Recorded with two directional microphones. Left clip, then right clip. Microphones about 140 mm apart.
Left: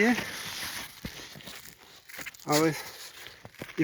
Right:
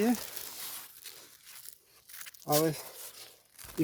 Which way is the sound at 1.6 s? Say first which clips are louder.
Left 8 dB; 35° right (ahead or behind).